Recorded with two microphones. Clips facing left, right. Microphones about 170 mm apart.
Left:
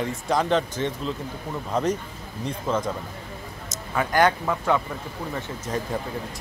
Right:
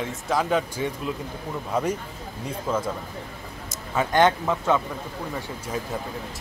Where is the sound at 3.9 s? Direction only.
20° right (ahead or behind).